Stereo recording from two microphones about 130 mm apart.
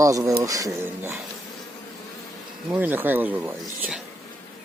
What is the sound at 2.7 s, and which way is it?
Speech, 15° right (ahead or behind).